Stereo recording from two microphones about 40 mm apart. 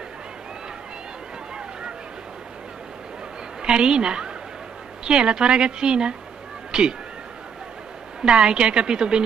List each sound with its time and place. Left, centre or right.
3.6 s a woman's voice: right
8.2 s speech: right